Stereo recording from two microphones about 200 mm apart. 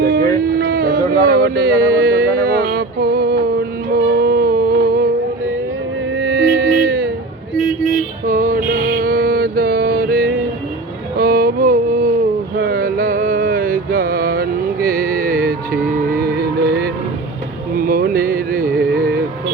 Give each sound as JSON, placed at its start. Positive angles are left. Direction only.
{"t": 0.0, "sound": "a sound", "side_deg": -50}
{"t": 6.1, "sound": "music", "side_deg": -55}
{"t": 8.3, "sound": "mantra", "side_deg": -45}
{"t": 11.2, "sound": "a sound", "side_deg": -50}
{"t": 12.5, "sound": "music", "side_deg": -50}
{"t": 17.7, "sound": "carnatic music", "side_deg": -45}